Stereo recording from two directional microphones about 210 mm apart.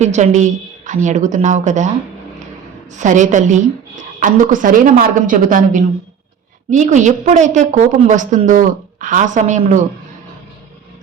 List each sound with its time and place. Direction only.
0.0 s a woman's voice: 35° right (ahead or behind)
2.9 s a woman's voice: 35° right (ahead or behind)